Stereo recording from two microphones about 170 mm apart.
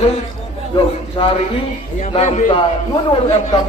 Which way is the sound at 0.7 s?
30° left (ahead or behind).